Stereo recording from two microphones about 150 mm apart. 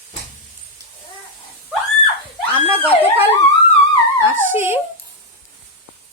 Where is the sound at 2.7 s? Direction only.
15° right (ahead or behind).